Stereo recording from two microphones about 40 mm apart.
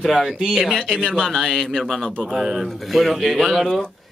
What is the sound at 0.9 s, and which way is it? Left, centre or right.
Speech, centre.